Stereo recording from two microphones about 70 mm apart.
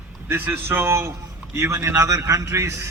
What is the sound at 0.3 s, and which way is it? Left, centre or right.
A man's voice, right.